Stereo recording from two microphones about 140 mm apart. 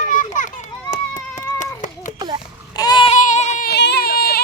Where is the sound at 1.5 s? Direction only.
65° left (ahead or behind).